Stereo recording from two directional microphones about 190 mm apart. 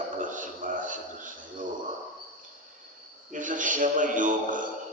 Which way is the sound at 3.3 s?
45° right (ahead or behind).